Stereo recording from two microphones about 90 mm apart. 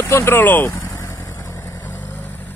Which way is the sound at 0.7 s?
35° left (ahead or behind).